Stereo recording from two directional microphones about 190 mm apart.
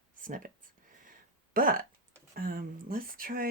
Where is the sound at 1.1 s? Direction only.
45° right (ahead or behind).